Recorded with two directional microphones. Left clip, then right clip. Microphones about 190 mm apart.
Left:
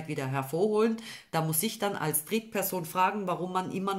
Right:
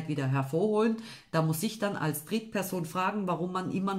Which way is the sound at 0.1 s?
35° left (ahead or behind).